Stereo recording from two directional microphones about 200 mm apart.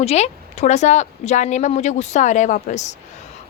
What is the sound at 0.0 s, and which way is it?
A woman's voice, 35° left (ahead or behind).